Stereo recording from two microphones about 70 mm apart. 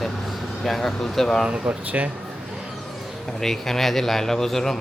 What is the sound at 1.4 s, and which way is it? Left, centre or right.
Speech, centre.